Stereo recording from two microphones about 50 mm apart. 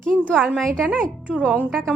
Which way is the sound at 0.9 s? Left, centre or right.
Right.